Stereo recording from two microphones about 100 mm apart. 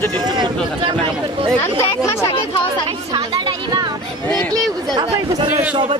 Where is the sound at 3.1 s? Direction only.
50° right (ahead or behind).